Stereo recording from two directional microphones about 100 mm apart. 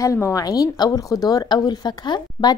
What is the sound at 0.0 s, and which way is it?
A woman's voice, 30° left (ahead or behind).